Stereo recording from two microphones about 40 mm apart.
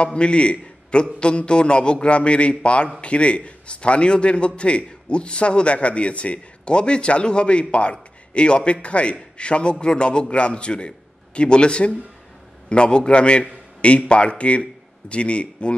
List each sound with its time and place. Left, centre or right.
0.0 s a man's voice: left